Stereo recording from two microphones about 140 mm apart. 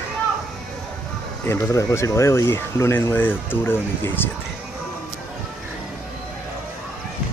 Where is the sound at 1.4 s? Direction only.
20° left (ahead or behind).